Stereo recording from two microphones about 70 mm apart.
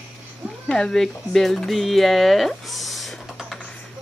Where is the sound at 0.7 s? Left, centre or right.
Centre.